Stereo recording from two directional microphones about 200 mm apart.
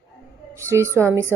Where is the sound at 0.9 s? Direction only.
10° left (ahead or behind).